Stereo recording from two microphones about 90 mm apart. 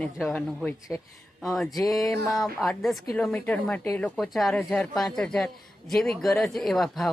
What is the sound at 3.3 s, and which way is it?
Speech, 15° left (ahead or behind).